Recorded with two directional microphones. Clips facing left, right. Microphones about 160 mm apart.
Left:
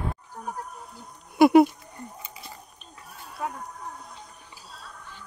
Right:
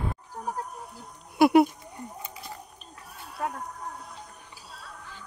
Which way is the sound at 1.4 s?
5° right (ahead or behind).